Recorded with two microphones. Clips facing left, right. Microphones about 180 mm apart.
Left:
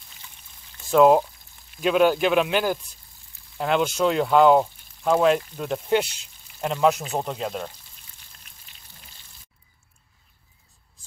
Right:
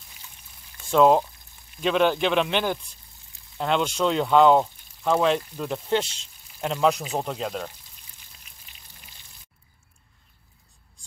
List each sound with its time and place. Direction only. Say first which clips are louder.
0.9 s speech: left 2 dB; 5° left (ahead or behind)